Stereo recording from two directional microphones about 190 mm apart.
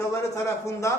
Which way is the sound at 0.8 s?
15° left (ahead or behind).